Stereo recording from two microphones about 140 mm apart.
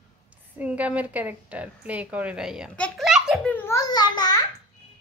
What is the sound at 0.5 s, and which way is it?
A woman's voice, 10° right (ahead or behind).